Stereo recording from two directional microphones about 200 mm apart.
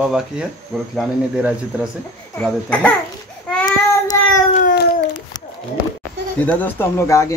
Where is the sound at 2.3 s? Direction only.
5° left (ahead or behind).